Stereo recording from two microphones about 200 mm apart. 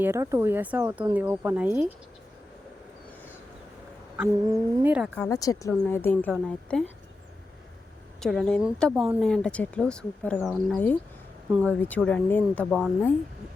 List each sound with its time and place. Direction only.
0.0 s speech: 15° right (ahead or behind)
4.4 s speech: 15° right (ahead or behind)
5.1 s speech: 15° left (ahead or behind)
8.2 s speech: centre (ahead or behind)